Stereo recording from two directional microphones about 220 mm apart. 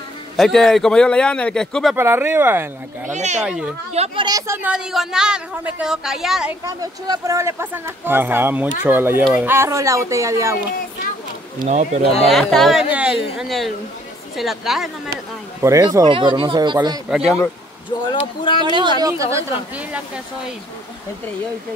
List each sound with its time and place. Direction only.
0.4 s speech: centre (ahead or behind)
2.0 s speech: 10° right (ahead or behind)
3.1 s speech: 30° right (ahead or behind)
3.4 s speech: 5° right (ahead or behind)
3.9 s speech: 25° right (ahead or behind); by 6.5 s centre (ahead or behind)
6.6 s speech: 15° right (ahead or behind)
11.6 s speech: 30° right (ahead or behind)
12.3 s speech: centre (ahead or behind)
15.6 s speech: 15° right (ahead or behind)
18.0 s speech: 20° left (ahead or behind)
18.6 s speech: 20° right (ahead or behind)